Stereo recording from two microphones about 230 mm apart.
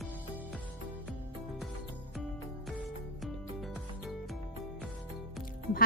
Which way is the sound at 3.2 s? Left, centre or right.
Centre.